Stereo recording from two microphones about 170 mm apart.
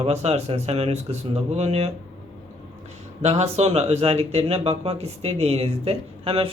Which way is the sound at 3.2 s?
40° right (ahead or behind).